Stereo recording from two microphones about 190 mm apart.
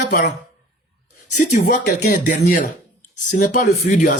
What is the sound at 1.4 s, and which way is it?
A man's voice, 40° left (ahead or behind).